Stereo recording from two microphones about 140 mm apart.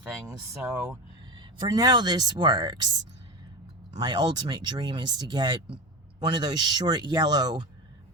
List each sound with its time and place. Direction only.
0.3 s speech: 20° right (ahead or behind)